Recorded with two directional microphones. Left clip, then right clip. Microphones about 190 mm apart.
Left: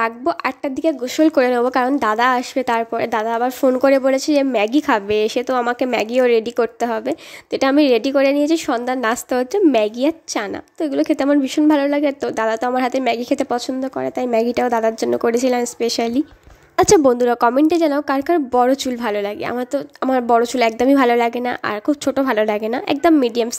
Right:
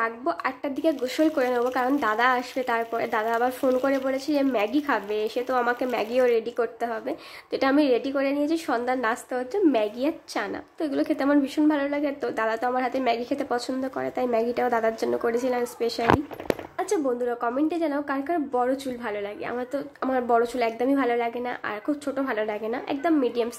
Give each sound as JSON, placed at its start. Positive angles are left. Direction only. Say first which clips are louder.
{"t": 0.0, "sound": "a woman's voice", "louder": "left 7 dB", "side_deg": 40}